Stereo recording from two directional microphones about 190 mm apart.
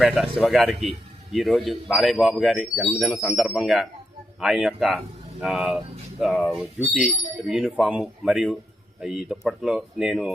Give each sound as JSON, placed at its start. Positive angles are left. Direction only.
{"t": 0.0, "sound": "speech", "side_deg": 0}